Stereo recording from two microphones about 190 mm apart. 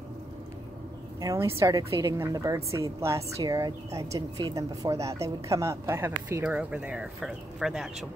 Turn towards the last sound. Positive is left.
turn(degrees=0)  # may be behind; listen again after turning